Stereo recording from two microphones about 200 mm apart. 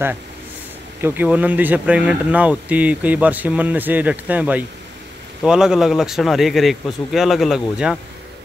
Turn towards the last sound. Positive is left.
turn(degrees=-5)  # may be behind; listen again after turning